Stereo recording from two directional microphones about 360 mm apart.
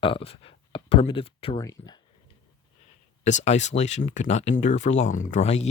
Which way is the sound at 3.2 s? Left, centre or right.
Centre.